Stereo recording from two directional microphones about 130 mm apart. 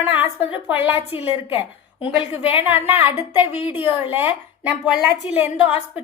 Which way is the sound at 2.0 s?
15° right (ahead or behind).